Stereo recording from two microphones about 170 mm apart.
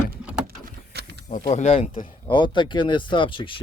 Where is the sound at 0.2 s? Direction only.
5° right (ahead or behind).